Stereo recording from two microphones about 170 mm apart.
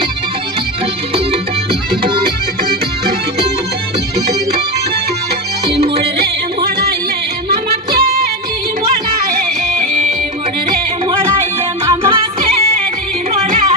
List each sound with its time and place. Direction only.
1.1 s music: 30° right (ahead or behind)
5.9 s music: 70° right (ahead or behind)
7.4 s music: 65° right (ahead or behind)
9.8 s music: 45° right (ahead or behind)
11.9 s music: 30° right (ahead or behind)